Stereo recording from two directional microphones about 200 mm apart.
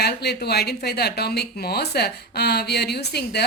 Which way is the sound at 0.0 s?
55° left (ahead or behind).